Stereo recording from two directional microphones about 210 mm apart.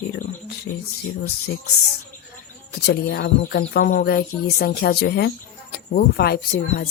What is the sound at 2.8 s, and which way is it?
A woman's voice, 50° left (ahead or behind).